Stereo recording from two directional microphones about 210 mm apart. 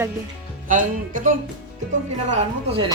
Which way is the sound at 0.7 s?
40° right (ahead or behind).